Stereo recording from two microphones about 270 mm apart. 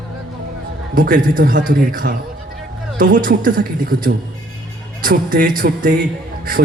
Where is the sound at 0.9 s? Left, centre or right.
Right.